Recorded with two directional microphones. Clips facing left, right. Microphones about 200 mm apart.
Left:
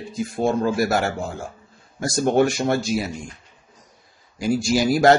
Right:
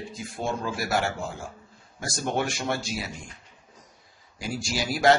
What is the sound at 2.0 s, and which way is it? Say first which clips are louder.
Speech: left 10 dB; 40° left (ahead or behind).